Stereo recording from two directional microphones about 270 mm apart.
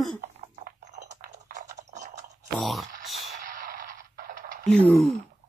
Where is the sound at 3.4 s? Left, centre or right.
Right.